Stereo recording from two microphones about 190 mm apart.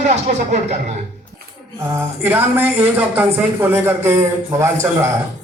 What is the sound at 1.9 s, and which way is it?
A man's voice, 10° right (ahead or behind).